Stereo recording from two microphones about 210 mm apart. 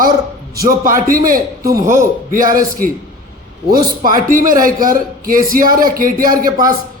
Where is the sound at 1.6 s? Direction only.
15° right (ahead or behind).